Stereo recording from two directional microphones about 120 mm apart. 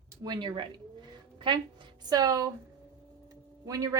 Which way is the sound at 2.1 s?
35° right (ahead or behind).